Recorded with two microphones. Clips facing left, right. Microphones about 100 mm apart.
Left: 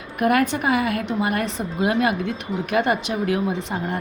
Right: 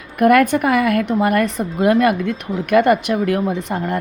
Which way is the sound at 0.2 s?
55° right (ahead or behind).